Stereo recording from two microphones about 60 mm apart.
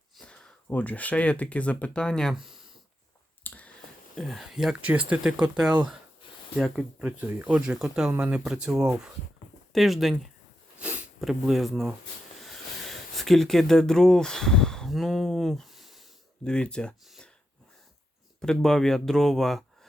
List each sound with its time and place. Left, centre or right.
0.7 s speech: left
2.3 s speech: centre
3.4 s a sound: left
4.1 s speech: centre
4.8 s speech: right
5.2 s speech: centre
7.0 s speech: centre
9.7 s speech: centre
10.8 s sniff: right
11.2 s speech: centre
12.4 s a sound: centre
14.9 s speech: centre
16.4 s speech: centre
18.3 s speech: centre